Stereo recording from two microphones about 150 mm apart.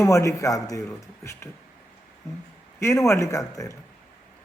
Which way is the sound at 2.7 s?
20° left (ahead or behind).